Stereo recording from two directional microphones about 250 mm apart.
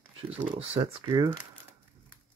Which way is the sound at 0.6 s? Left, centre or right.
Centre.